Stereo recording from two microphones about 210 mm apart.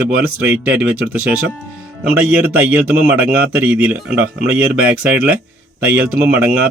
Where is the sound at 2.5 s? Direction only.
10° right (ahead or behind).